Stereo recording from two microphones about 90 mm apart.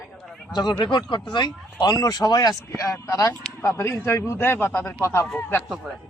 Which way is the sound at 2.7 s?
35° left (ahead or behind).